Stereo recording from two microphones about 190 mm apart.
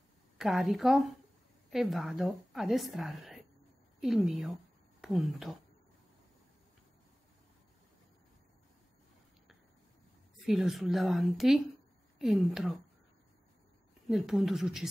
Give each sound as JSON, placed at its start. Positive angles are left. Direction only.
{"t": 0.4, "sound": "a woman's voice", "side_deg": 0}
{"t": 10.4, "sound": "a woman's voice", "side_deg": 0}
{"t": 14.0, "sound": "a woman's voice", "side_deg": 0}